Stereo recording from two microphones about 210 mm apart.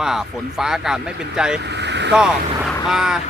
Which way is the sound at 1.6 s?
55° right (ahead or behind).